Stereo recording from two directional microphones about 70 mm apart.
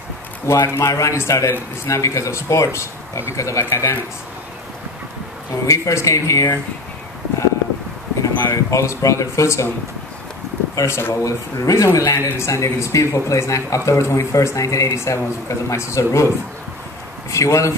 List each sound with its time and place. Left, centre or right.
0.7 s speech: left
5.7 s speech: left
8.2 s speech: left
10.8 s speech: left
11.6 s speech: left
11.9 s speech: left
17.3 s speech: left